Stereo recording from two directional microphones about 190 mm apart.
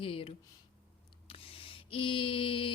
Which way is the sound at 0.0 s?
30° left (ahead or behind).